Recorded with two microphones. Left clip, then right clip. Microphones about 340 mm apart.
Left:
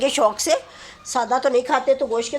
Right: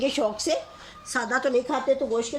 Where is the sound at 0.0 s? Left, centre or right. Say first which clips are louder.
Left 6 dB; left.